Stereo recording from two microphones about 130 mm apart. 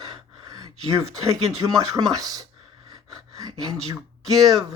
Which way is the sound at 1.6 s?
30° right (ahead or behind).